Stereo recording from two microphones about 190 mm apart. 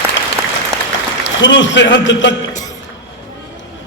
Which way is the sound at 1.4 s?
70° left (ahead or behind).